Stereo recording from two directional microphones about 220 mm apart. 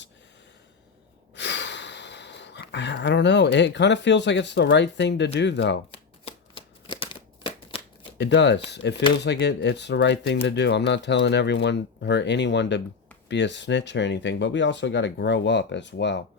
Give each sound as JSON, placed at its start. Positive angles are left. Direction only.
{"t": 1.4, "sound": "speech", "side_deg": 50}
{"t": 6.2, "sound": "shuffling cards", "side_deg": 20}
{"t": 8.2, "sound": "speech", "side_deg": 50}